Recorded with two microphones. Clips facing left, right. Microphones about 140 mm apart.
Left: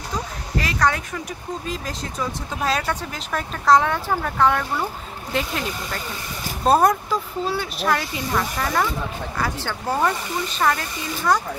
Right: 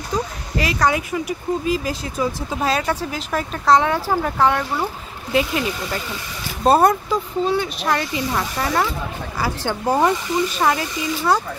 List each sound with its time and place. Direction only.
0.6 s speech: 10° right (ahead or behind)
9.4 s speech: 15° right (ahead or behind)